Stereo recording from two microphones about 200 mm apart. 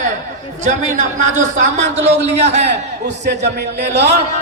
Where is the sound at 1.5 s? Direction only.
65° right (ahead or behind).